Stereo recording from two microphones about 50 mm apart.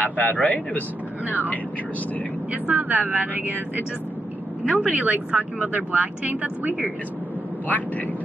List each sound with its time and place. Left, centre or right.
0.0 s speech: left
2.5 s speech: right